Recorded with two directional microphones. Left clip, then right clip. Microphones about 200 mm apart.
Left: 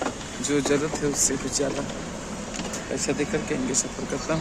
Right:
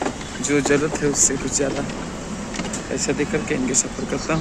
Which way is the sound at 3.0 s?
10° left (ahead or behind).